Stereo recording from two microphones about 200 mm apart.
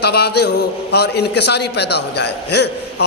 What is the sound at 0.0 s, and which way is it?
A man's voice, 55° left (ahead or behind).